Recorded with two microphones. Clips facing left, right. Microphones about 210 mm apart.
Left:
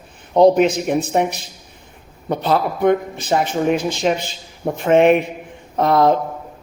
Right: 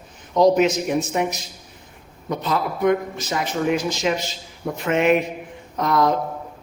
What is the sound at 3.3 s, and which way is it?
Speech, 55° left (ahead or behind).